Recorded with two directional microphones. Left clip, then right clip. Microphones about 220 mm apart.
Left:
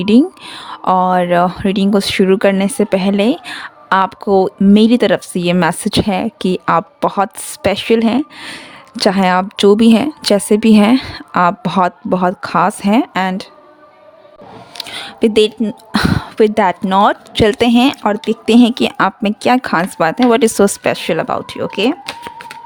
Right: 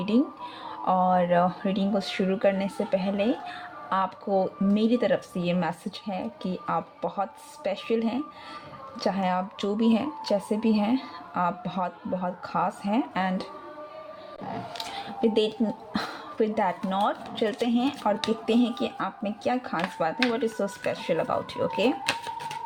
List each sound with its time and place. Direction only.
0.0 s speech: 45° left (ahead or behind)
14.8 s speech: 40° left (ahead or behind)